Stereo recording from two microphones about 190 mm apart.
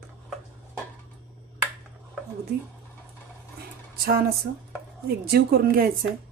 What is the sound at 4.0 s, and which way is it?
A woman's voice, 55° right (ahead or behind).